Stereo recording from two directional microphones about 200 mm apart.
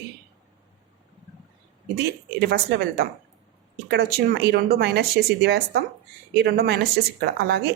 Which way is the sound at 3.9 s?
50° right (ahead or behind).